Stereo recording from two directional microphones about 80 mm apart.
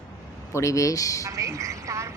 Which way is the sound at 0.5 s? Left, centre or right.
Left.